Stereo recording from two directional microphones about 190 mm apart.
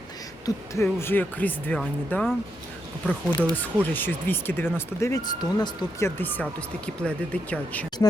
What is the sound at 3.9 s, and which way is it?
Speech, 10° left (ahead or behind).